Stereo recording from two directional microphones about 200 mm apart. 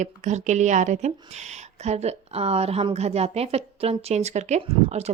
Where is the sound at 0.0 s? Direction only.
35° right (ahead or behind).